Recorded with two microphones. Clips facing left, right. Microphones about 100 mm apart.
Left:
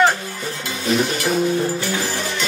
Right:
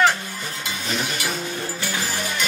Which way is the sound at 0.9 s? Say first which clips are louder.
Left 8 dB; centre (ahead or behind).